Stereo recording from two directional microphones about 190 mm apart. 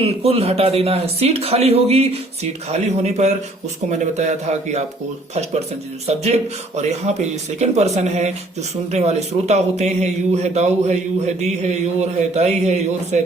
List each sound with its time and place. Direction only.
0.0 s a man's voice: 30° right (ahead or behind)